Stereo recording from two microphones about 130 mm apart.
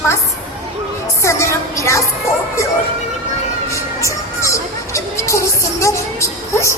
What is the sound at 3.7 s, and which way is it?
Music, 25° left (ahead or behind).